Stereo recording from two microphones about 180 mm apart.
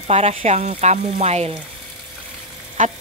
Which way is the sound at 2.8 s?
45° right (ahead or behind).